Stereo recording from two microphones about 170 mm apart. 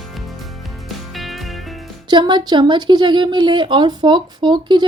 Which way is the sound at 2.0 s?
25° right (ahead or behind).